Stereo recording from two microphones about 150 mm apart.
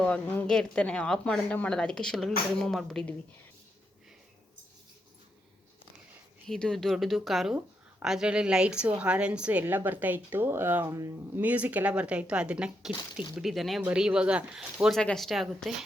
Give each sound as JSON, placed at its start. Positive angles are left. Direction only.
{"t": 0.0, "sound": "speech", "side_deg": 10}
{"t": 6.5, "sound": "a woman's voice", "side_deg": 5}